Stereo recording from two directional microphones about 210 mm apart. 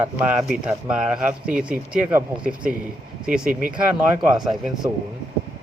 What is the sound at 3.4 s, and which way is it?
Speech, 40° right (ahead or behind).